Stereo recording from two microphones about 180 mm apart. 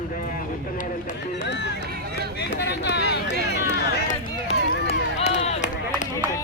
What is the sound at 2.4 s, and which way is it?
Speech, 70° left (ahead or behind).